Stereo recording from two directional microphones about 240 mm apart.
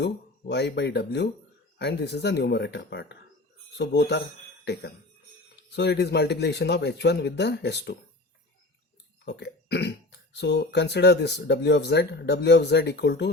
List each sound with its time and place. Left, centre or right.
0.0 s speech: left
9.2 s speech: left